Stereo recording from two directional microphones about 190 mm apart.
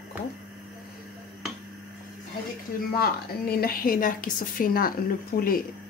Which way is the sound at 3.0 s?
55° left (ahead or behind).